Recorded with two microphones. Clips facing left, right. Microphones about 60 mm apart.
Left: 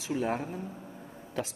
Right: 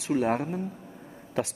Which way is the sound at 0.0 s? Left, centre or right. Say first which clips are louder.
Right 5 dB; right.